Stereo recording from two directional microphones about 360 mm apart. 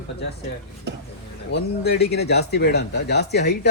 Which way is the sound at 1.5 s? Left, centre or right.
Left.